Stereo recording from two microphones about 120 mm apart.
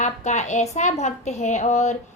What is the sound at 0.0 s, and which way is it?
A woman's voice, 75° left (ahead or behind).